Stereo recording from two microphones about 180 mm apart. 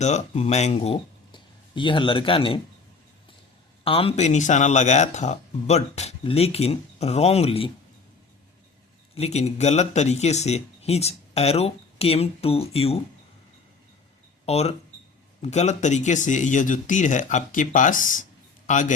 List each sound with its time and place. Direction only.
0.0 s speech: 40° left (ahead or behind)
3.8 s speech: 30° left (ahead or behind)
9.1 s speech: 35° left (ahead or behind)
14.4 s speech: 35° left (ahead or behind)